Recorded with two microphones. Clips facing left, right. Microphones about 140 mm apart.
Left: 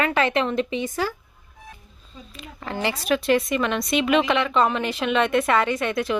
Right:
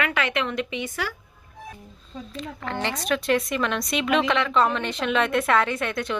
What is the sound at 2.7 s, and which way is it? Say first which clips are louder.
A woman's voice: left 3 dB; 5° left (ahead or behind).